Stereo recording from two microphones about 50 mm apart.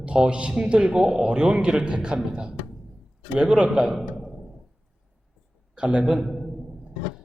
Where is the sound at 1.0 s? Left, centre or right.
Centre.